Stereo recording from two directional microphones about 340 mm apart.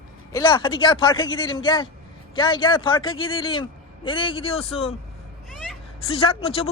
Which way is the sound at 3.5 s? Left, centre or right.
Centre.